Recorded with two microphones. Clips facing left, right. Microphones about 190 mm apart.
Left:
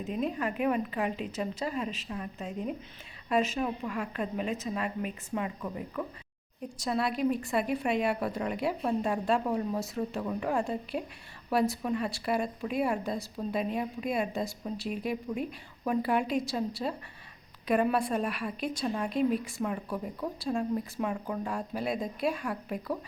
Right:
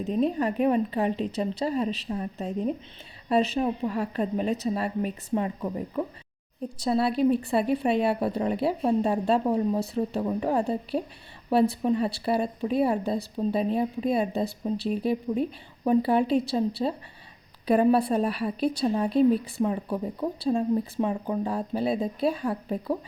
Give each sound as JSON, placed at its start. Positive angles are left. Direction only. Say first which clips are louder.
{"t": 0.0, "sound": "a woman's voice", "louder": "right 7 dB", "side_deg": -35}